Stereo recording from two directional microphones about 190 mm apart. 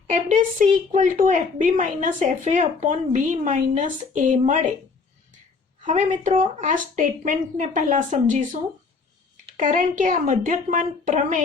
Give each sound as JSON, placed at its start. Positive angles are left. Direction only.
{"t": 0.1, "sound": "a woman's voice", "side_deg": -40}
{"t": 5.8, "sound": "a woman's voice", "side_deg": -40}
{"t": 9.6, "sound": "a woman's voice", "side_deg": -45}